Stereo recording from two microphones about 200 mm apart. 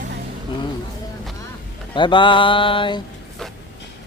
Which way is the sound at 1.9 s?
25° left (ahead or behind).